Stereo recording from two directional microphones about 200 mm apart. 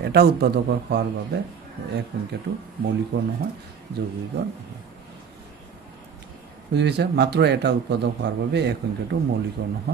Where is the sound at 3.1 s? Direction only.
60° right (ahead or behind).